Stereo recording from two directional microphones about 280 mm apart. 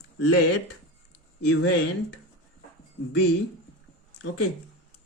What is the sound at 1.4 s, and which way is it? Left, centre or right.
Speech, left.